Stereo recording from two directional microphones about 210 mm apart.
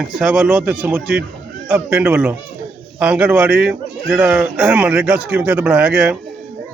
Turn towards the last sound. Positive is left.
turn(degrees=-5)  # may be behind; listen again after turning